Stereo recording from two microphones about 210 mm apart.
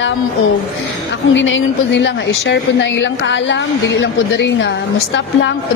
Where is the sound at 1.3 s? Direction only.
60° left (ahead or behind).